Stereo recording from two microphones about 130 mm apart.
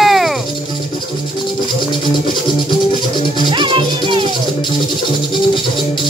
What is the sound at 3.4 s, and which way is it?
Music, 35° right (ahead or behind).